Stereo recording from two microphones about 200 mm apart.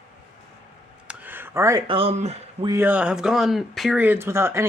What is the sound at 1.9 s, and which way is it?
Speech, 30° right (ahead or behind).